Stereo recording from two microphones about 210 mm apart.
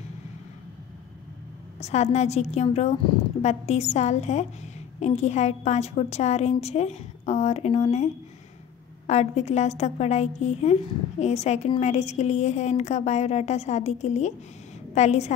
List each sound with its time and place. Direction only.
1.8 s a woman's voice: 30° left (ahead or behind)